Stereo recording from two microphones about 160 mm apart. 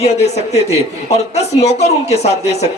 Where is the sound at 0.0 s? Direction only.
40° left (ahead or behind).